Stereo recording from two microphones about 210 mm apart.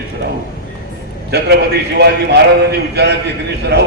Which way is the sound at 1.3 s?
50° right (ahead or behind).